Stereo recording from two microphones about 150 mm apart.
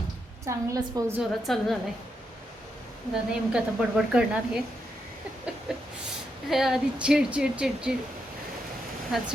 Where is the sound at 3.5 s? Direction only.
5° right (ahead or behind).